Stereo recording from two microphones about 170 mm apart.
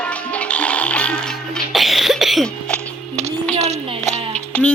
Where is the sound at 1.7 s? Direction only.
Centre (ahead or behind).